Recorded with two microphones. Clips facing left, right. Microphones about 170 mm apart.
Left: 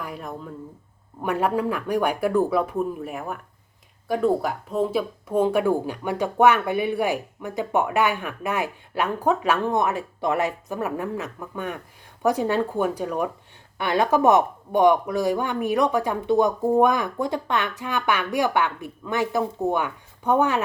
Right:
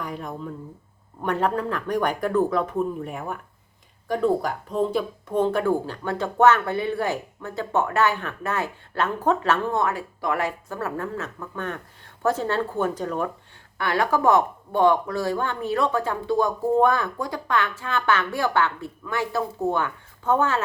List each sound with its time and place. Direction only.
0.0 s speech: 5° left (ahead or behind)